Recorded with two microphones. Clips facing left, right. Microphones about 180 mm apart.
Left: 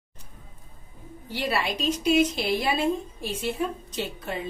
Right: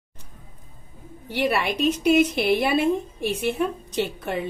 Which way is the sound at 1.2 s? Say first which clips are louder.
Right 4 dB; 65° right (ahead or behind).